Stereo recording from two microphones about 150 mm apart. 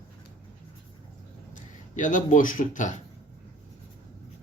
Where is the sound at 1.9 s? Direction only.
55° left (ahead or behind).